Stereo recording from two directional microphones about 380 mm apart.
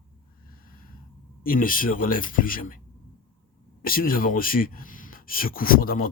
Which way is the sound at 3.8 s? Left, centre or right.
Left.